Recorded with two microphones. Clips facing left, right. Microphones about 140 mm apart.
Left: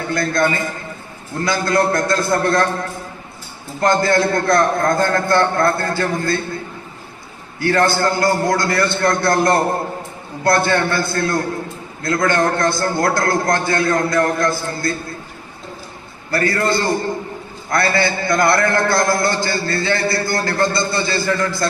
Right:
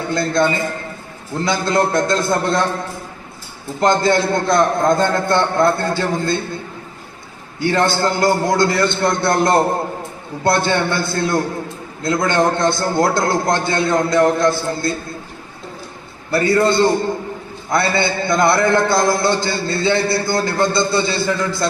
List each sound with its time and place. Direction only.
0.1 s a man's voice: 20° right (ahead or behind)
3.8 s a man's voice: 20° right (ahead or behind)
7.6 s a man's voice: 20° right (ahead or behind)
16.3 s a man's voice: 20° right (ahead or behind)